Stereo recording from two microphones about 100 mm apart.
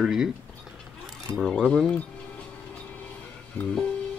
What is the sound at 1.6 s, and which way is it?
Speech, 10° left (ahead or behind).